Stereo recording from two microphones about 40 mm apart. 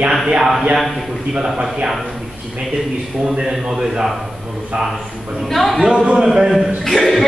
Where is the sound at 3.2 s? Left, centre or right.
Centre.